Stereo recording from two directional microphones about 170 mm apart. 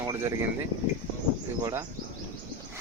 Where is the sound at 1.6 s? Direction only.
15° right (ahead or behind).